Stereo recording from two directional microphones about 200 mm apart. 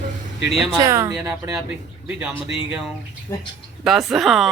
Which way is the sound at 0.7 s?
20° right (ahead or behind).